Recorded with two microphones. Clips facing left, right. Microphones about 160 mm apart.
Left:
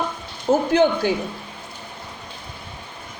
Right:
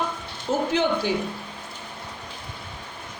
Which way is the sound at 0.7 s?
45° left (ahead or behind).